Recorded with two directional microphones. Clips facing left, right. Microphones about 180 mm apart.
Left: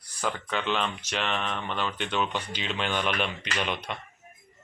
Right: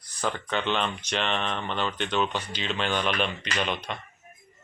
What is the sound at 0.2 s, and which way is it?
Speech, 5° left (ahead or behind).